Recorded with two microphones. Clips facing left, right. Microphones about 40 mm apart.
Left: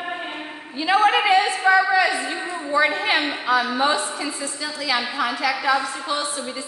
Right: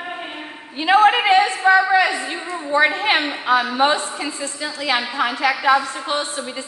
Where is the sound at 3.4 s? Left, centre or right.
Right.